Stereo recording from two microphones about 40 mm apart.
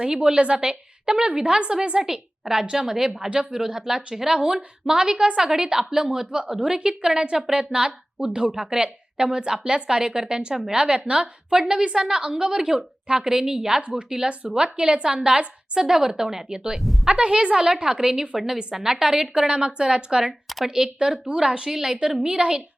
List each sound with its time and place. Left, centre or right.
0.0 s a woman's voice: right
2.0 s a woman's voice: centre
4.4 s a woman's voice: right
14.3 s a woman's voice: right
16.7 s a woman's voice: centre
17.1 s a woman's voice: right